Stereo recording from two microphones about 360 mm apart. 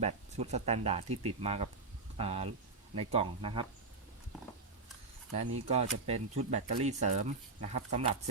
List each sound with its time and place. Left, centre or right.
0.0 s speech: centre
5.4 s speech: centre